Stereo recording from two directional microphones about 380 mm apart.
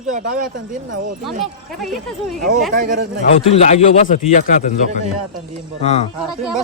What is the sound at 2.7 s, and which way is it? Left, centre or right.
Speech, centre.